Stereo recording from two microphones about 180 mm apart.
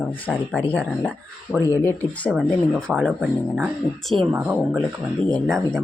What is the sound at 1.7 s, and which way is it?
Speech, 15° left (ahead or behind).